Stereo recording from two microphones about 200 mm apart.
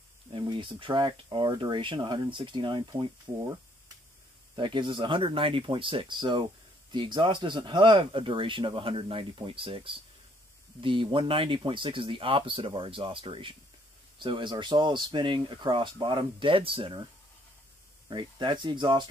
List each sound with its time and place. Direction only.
0.3 s speech: 25° right (ahead or behind)
4.6 s speech: 25° right (ahead or behind)